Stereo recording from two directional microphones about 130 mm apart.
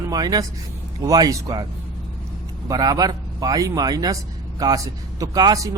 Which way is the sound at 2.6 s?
30° right (ahead or behind).